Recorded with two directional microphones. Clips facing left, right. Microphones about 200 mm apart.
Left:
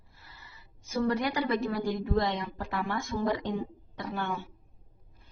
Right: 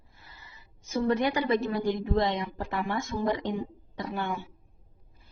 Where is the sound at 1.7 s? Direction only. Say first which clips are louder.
Right 2 dB; 20° right (ahead or behind).